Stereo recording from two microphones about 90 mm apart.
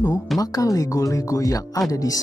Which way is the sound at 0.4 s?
40° left (ahead or behind).